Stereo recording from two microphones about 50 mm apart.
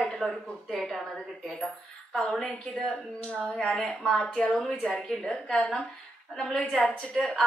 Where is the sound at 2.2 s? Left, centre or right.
Centre.